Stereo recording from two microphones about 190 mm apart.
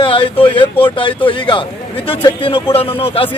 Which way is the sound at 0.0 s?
25° left (ahead or behind).